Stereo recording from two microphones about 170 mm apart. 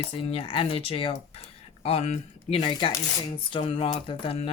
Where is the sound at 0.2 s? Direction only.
35° left (ahead or behind).